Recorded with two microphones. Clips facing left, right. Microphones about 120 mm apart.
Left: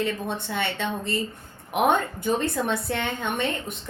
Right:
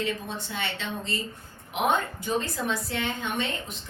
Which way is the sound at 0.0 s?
60° left (ahead or behind).